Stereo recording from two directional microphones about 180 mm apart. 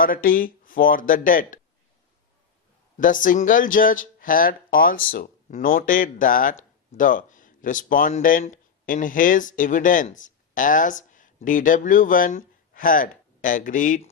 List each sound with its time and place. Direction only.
0.0 s speech: 50° left (ahead or behind)
3.0 s speech: 50° left (ahead or behind)